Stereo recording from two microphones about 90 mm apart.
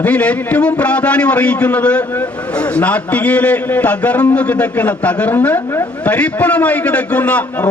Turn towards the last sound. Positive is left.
turn(degrees=15)  # may be behind; listen again after turning